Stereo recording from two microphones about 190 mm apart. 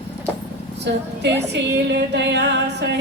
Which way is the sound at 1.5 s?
65° right (ahead or behind).